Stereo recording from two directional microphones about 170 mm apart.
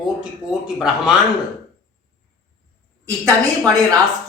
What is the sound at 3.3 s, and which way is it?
Speech, 20° right (ahead or behind).